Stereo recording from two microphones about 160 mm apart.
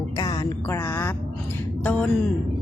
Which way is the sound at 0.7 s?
15° left (ahead or behind).